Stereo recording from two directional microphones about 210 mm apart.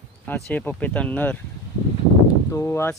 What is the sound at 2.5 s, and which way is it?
Speech, 10° left (ahead or behind).